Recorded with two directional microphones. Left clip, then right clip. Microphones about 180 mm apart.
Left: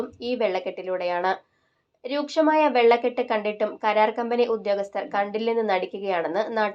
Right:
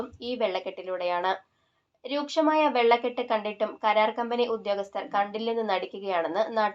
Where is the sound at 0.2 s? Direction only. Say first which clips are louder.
Left 3 dB; 30° left (ahead or behind).